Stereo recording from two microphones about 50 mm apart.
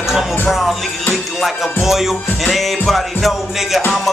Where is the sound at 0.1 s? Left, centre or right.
Centre.